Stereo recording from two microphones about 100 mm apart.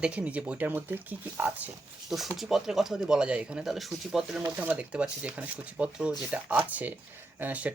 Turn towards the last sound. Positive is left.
turn(degrees=-15)  # may be behind; listen again after turning